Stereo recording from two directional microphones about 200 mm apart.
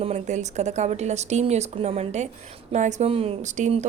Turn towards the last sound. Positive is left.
turn(degrees=-35)  # may be behind; listen again after turning